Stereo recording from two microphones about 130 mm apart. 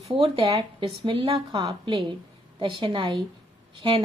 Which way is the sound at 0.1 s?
40° right (ahead or behind).